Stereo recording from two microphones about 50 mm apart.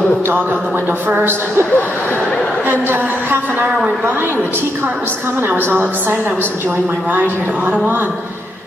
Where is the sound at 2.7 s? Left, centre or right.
Right.